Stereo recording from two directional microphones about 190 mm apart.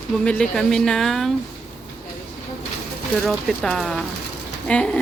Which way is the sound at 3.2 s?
Centre (ahead or behind).